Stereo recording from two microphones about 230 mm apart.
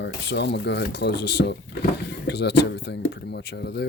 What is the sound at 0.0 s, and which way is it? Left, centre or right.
Speech, left.